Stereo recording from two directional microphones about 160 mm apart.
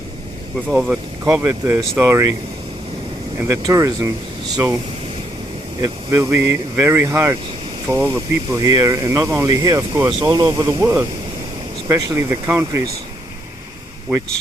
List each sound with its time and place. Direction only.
0.7 s speech: 5° right (ahead or behind)
1.2 s speech: 15° right (ahead or behind)
3.4 s speech: 20° right (ahead or behind)
5.8 s speech: 20° right (ahead or behind)